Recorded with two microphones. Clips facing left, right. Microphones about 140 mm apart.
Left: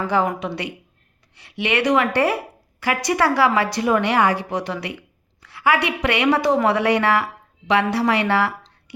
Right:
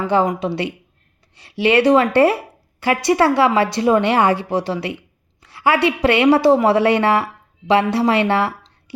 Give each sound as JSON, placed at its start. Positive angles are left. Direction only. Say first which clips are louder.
{"t": 0.0, "sound": "a woman's voice", "louder": "right 3 dB", "side_deg": -25}